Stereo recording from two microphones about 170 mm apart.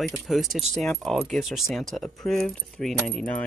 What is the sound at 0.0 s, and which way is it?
Speech, centre (ahead or behind).